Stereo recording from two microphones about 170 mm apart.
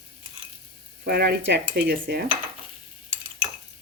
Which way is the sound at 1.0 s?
65° right (ahead or behind).